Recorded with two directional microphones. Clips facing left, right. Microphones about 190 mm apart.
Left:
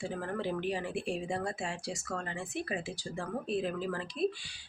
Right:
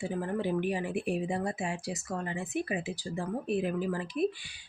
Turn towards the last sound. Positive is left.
turn(degrees=-15)  # may be behind; listen again after turning